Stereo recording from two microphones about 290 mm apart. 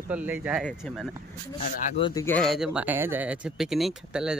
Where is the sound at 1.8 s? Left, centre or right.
Centre.